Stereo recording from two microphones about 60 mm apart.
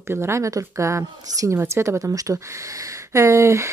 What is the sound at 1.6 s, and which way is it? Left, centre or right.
Speech, right.